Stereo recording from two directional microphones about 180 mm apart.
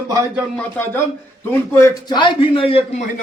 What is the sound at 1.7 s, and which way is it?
A man's voice, 15° left (ahead or behind).